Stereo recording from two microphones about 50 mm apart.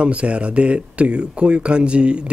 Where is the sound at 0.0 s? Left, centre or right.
Right.